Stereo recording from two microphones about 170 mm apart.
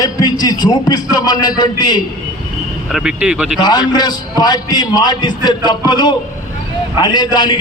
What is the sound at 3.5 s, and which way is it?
A man's voice, 25° left (ahead or behind).